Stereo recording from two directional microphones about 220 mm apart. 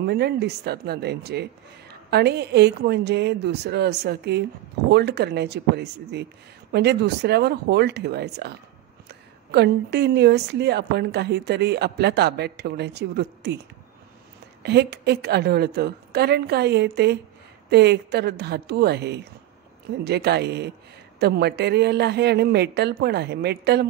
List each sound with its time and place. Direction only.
0.0 s speech: 45° right (ahead or behind)